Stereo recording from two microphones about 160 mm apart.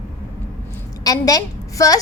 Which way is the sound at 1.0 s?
25° left (ahead or behind).